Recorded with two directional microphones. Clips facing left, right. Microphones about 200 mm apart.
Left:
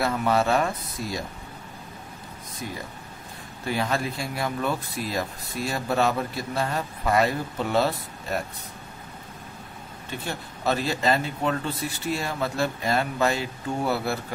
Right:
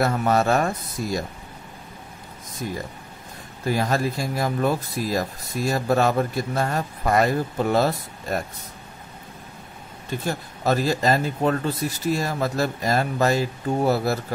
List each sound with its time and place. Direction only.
0.0 s speech: 45° right (ahead or behind)
3.6 s speech: 40° right (ahead or behind)
10.2 s speech: 40° right (ahead or behind)